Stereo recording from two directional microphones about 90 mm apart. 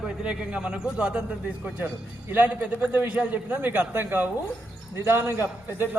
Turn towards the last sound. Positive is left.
turn(degrees=-25)  # may be behind; listen again after turning